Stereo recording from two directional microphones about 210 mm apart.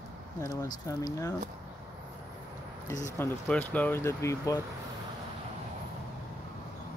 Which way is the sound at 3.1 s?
10° left (ahead or behind).